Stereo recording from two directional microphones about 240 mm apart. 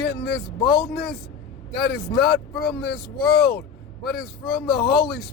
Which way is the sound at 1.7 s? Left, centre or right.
Left.